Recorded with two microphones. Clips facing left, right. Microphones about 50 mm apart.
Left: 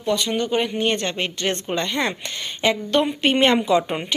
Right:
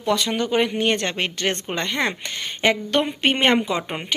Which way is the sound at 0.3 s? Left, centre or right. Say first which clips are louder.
Right 1 dB; right.